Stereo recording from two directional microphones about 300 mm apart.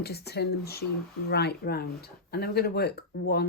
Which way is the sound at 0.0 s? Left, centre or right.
Left.